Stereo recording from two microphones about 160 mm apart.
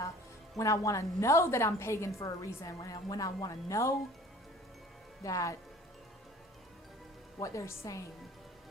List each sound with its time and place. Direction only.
0.6 s a woman's voice: 20° left (ahead or behind)
5.2 s a woman's voice: 20° left (ahead or behind)
7.3 s a woman's voice: 20° left (ahead or behind)